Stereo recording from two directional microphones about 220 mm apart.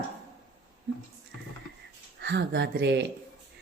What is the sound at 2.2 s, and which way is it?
Speech, 50° right (ahead or behind).